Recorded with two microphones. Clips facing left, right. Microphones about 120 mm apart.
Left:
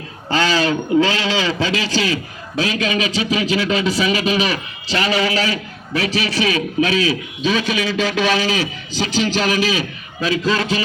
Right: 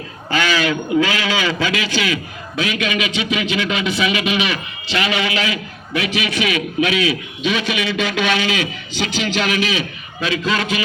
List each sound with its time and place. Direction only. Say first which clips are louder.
0.3 s a man's voice: left 1 dB; 30° left (ahead or behind)